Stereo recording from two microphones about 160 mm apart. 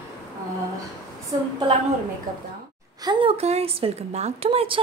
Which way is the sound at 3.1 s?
35° right (ahead or behind).